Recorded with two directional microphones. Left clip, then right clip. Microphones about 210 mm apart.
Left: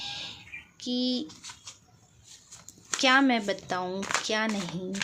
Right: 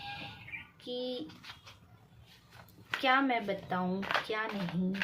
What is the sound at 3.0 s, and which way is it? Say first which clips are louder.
Speech: left 6 dB; 45° left (ahead or behind).